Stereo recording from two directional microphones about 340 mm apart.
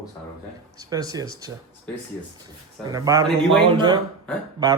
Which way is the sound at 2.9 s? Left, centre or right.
Centre.